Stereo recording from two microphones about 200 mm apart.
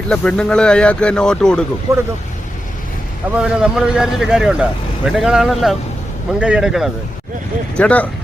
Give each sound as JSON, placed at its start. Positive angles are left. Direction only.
{"t": 0.1, "sound": "speech", "side_deg": 5}
{"t": 1.9, "sound": "speech", "side_deg": -15}
{"t": 3.3, "sound": "speech", "side_deg": -5}